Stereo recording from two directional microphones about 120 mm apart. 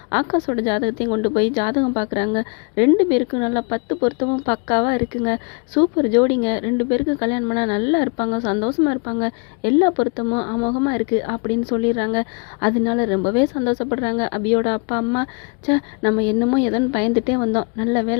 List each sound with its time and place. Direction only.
0.1 s a woman's voice: 45° left (ahead or behind)